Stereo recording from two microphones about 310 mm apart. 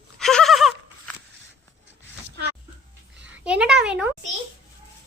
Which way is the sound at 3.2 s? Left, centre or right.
Right.